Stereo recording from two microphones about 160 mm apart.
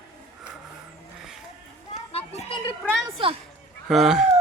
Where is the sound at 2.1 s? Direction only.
40° left (ahead or behind).